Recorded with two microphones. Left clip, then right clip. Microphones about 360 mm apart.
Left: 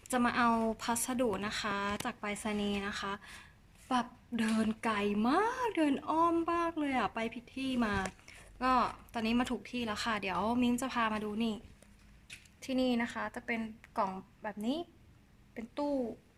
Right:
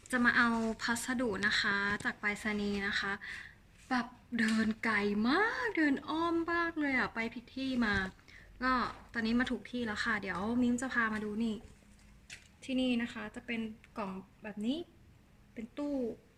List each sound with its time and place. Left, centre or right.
0.1 s a woman's voice: centre
12.6 s a woman's voice: centre